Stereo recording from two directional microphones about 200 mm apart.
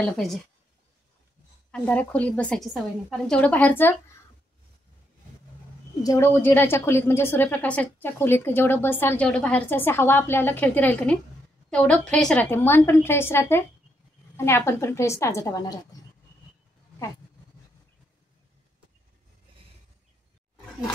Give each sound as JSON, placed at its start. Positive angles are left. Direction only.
{"t": 0.0, "sound": "a woman's voice", "side_deg": 0}
{"t": 1.7, "sound": "a woman's voice", "side_deg": 5}
{"t": 6.0, "sound": "a woman's voice", "side_deg": 15}
{"t": 15.9, "sound": "a sound", "side_deg": 20}